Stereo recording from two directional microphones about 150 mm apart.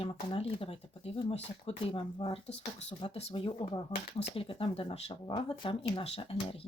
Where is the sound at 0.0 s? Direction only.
40° left (ahead or behind).